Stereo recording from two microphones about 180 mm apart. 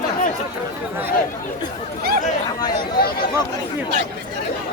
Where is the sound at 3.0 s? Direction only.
60° left (ahead or behind).